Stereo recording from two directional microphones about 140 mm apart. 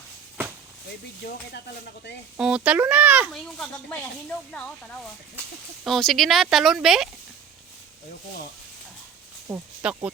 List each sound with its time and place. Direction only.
1.2 s speech: 90° left
2.4 s a child's voice: 5° right (ahead or behind)
3.3 s speech: 10° left (ahead or behind)
9.5 s a child's voice: 10° right (ahead or behind)